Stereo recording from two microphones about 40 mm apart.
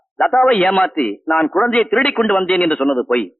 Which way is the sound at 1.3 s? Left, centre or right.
Centre.